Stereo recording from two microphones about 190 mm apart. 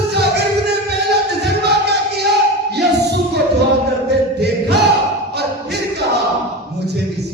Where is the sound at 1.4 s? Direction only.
60° right (ahead or behind).